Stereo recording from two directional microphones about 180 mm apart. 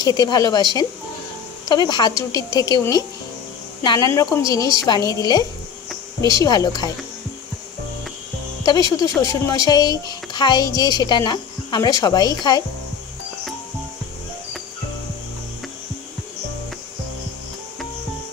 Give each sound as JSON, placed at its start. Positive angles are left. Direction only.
{"t": 0.0, "sound": "speech", "side_deg": 25}
{"t": 9.0, "sound": "speech", "side_deg": 20}